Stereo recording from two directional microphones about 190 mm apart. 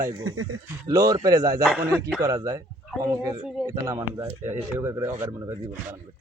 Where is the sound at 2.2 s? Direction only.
15° right (ahead or behind).